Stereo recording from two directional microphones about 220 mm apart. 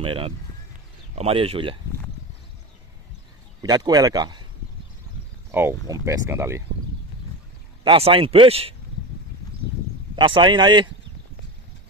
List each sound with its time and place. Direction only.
0.0 s a man's voice: 25° right (ahead or behind)
3.6 s speech: 20° right (ahead or behind)
5.5 s speech: 10° right (ahead or behind)
7.8 s a man's voice: 25° right (ahead or behind)
10.1 s a man's voice: 20° right (ahead or behind)